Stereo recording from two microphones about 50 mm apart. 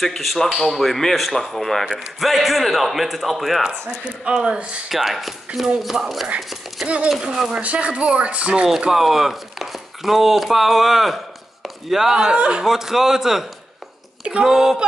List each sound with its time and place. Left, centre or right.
0.0 s speech: centre
4.2 s speech: centre
4.8 s a man's voice: centre
7.6 s speech: right
8.9 s speech: centre
12.6 s a man's voice: centre